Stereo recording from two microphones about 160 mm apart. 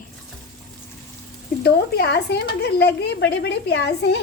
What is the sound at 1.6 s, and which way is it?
Speech, 85° left.